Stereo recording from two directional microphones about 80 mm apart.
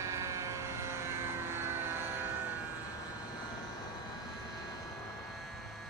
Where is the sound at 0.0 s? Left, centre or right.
Right.